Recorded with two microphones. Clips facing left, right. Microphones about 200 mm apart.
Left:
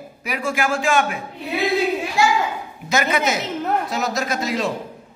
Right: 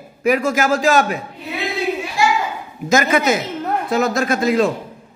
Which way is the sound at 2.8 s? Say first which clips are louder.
Right 5 dB; 50° right (ahead or behind).